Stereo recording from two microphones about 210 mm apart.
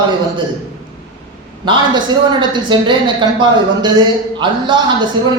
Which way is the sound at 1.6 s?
20° right (ahead or behind).